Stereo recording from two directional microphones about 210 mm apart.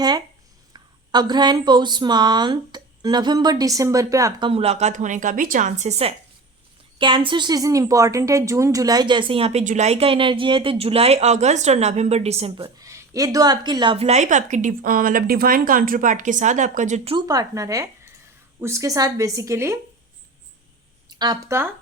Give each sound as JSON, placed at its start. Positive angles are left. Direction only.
{"t": 0.7, "sound": "a woman's voice", "side_deg": -20}
{"t": 12.8, "sound": "a woman's voice", "side_deg": -15}
{"t": 21.2, "sound": "a woman's voice", "side_deg": -15}